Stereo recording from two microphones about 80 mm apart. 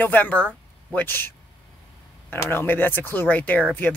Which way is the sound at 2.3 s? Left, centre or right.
Left.